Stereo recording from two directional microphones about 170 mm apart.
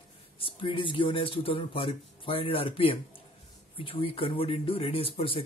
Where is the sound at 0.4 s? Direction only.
30° left (ahead or behind).